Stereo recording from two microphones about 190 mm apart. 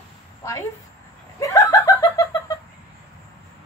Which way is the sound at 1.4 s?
15° left (ahead or behind).